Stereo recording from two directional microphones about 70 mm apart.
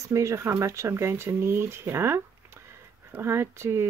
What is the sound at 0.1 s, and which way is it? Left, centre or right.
Speech, right.